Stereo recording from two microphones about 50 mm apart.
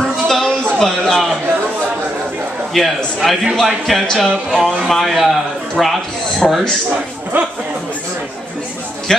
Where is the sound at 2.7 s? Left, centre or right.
Centre.